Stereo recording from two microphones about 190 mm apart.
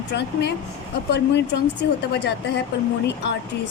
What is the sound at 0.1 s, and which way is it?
Speech, 65° left (ahead or behind).